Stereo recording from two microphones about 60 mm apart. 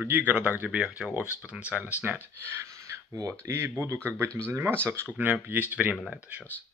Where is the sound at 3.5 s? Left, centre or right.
Right.